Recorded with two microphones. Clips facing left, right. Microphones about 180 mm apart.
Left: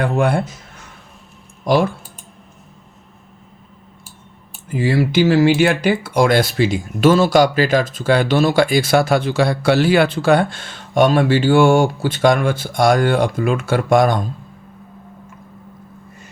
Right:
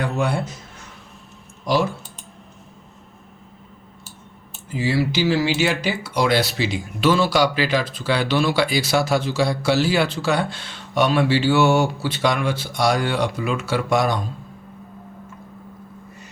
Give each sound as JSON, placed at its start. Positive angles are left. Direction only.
{"t": 0.0, "sound": "a man's voice", "side_deg": 55}
{"t": 1.6, "sound": "speech", "side_deg": 55}
{"t": 4.7, "sound": "speech", "side_deg": 50}